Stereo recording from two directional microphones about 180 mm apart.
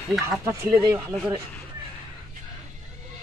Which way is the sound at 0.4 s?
15° right (ahead or behind).